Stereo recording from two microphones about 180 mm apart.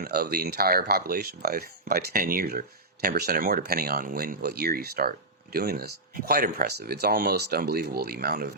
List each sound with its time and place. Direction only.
0.0 s speech: 55° right (ahead or behind)